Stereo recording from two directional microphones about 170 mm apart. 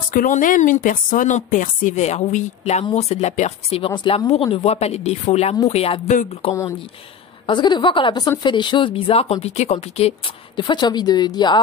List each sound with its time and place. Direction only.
0.1 s a woman's voice: 55° left (ahead or behind); by 11.6 s 25° left (ahead or behind)